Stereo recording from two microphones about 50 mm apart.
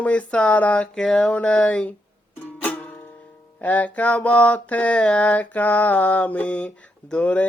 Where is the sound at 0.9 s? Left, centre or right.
Centre.